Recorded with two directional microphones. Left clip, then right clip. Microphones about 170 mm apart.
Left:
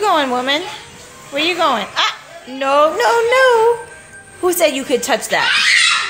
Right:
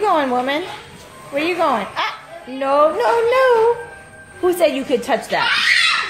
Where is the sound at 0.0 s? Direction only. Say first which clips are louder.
Left 2 dB; 10° left (ahead or behind).